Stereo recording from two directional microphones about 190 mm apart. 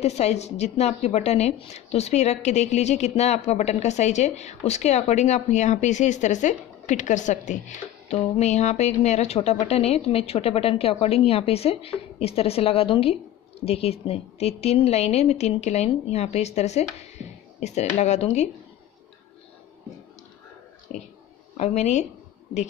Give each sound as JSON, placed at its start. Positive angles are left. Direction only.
{"t": 0.0, "sound": "a woman's voice", "side_deg": 35}
{"t": 20.9, "sound": "speech", "side_deg": 0}
{"t": 21.5, "sound": "a woman's voice", "side_deg": 35}